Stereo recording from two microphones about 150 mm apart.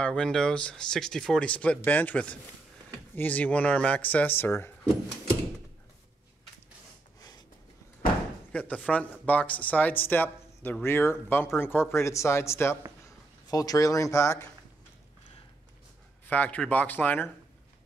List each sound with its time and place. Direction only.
0.0 s speech: 5° left (ahead or behind)
8.5 s speech: 10° left (ahead or behind)
16.3 s speech: 10° left (ahead or behind)